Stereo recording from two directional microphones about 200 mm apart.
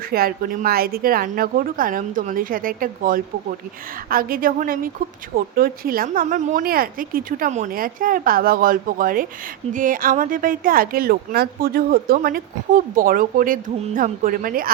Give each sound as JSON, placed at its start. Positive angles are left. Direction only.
{"t": 0.1, "sound": "speech", "side_deg": -50}